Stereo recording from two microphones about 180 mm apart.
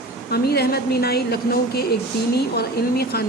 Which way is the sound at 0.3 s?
60° left (ahead or behind).